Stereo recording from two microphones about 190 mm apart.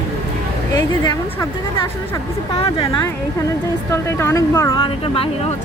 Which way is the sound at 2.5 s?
30° left (ahead or behind).